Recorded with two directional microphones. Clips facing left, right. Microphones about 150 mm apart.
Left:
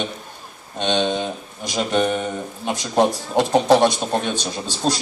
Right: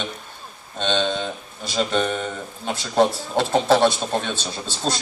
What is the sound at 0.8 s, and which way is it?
Speech, 15° left (ahead or behind).